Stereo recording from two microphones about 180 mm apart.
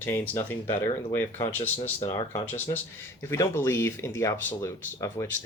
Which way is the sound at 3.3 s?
15° left (ahead or behind).